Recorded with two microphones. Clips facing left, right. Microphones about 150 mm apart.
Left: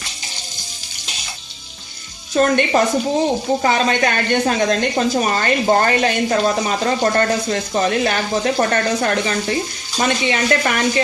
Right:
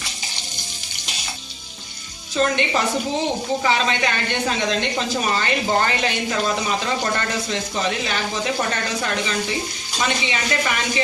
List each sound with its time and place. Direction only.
2.3 s speech: 50° left (ahead or behind)